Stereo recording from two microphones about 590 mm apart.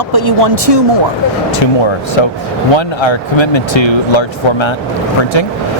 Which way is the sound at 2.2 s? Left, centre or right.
Left.